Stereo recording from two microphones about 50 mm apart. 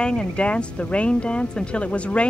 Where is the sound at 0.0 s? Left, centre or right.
Centre.